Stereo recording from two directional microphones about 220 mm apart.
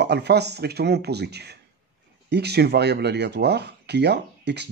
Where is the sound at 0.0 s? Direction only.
50° right (ahead or behind).